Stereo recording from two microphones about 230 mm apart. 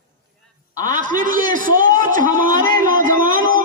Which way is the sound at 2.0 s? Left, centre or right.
Right.